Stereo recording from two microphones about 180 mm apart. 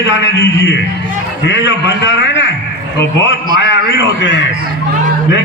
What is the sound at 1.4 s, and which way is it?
A man's voice, 80° left.